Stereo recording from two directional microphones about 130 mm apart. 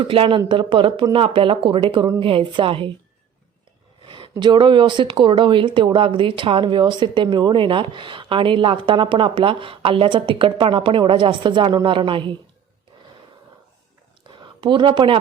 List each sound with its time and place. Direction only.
0.0 s speech: 40° right (ahead or behind)
4.0 s speech: 40° right (ahead or behind)
14.3 s a sound: 40° right (ahead or behind)